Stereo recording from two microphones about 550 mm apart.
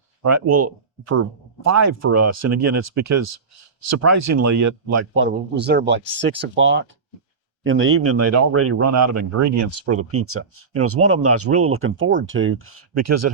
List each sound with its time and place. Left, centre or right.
0.2 s speech: right